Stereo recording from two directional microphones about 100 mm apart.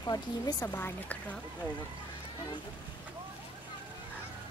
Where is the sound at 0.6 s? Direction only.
20° left (ahead or behind).